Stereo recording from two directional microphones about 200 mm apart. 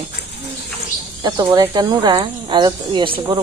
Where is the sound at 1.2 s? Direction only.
20° right (ahead or behind).